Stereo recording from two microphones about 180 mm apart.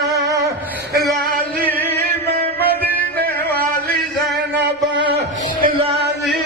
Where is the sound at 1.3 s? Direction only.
55° right (ahead or behind).